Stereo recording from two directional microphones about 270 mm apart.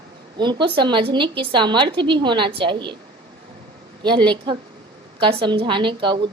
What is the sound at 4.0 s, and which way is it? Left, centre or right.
A woman's voice, centre.